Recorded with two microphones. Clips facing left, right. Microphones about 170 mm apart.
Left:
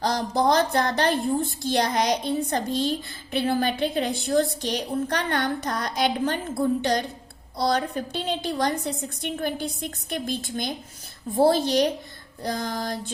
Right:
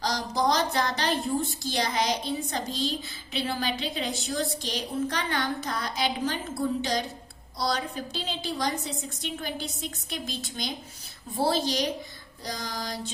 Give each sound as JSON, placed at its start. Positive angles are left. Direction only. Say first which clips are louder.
{"t": 0.0, "sound": "a woman's voice", "louder": "left 4 dB", "side_deg": 55}
{"t": 7.6, "sound": "a woman's voice", "louder": "left 5 dB", "side_deg": 60}